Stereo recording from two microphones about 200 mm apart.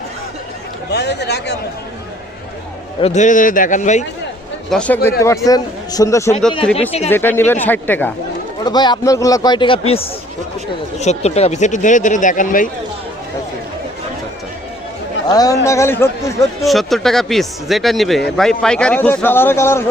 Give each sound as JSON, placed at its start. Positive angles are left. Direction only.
{"t": 0.9, "sound": "speech", "side_deg": 55}
{"t": 3.0, "sound": "speech", "side_deg": 35}
{"t": 4.7, "sound": "a man's voice", "side_deg": 5}
{"t": 8.6, "sound": "a man's voice", "side_deg": 20}
{"t": 15.3, "sound": "a man's voice", "side_deg": 20}
{"t": 16.6, "sound": "a man's voice", "side_deg": 0}